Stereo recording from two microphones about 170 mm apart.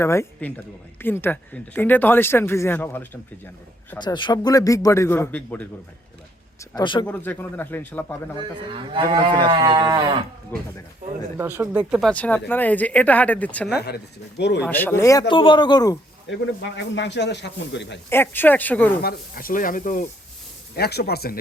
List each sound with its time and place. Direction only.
0.0 s speech: 15° left (ahead or behind)
3.9 s a man's voice: 25° left (ahead or behind); by 5.6 s 10° left (ahead or behind)
6.6 s a man's voice: 25° left (ahead or behind)
7.1 s speech: 10° left (ahead or behind)
8.4 s moo: 30° right (ahead or behind)
11.3 s speech: 10° right (ahead or behind); by 13.7 s 10° left (ahead or behind)
13.7 s speech: 70° left (ahead or behind); by 14.6 s 90° left
14.6 s speech: 10° left (ahead or behind)
15.3 s a man's voice: 30° left (ahead or behind)
16.3 s speech: 90° left
18.1 s speech: 10° left (ahead or behind)
19.0 s speech: 60° left (ahead or behind)
20.7 s speech: 70° left (ahead or behind)